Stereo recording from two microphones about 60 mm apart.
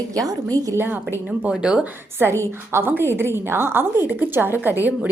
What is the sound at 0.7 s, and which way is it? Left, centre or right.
Speech, right.